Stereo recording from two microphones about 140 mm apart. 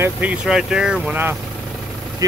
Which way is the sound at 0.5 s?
5° right (ahead or behind).